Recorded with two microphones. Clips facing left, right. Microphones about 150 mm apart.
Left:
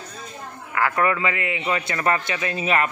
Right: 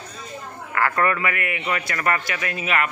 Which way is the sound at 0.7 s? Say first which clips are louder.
Even; 10° left (ahead or behind).